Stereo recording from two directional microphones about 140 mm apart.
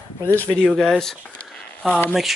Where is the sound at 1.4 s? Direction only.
5° left (ahead or behind).